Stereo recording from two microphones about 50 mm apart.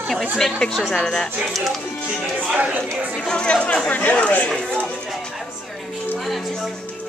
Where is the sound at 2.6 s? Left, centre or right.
Right.